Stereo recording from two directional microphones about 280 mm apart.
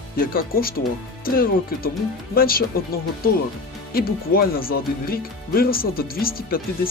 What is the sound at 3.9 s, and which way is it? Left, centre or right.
Speech, left.